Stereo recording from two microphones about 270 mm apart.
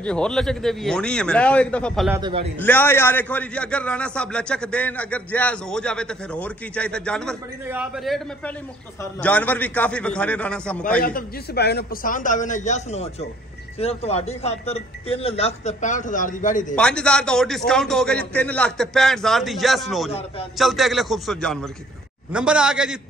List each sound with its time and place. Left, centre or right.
0.0 s a man's voice: centre
2.1 s a man's voice: centre
2.6 s a man's voice: centre
11.0 s speech: left
16.7 s a man's voice: centre
20.1 s speech: left
20.5 s a man's voice: centre